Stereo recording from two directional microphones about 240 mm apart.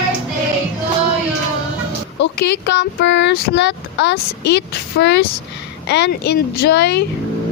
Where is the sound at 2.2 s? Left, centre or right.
Left.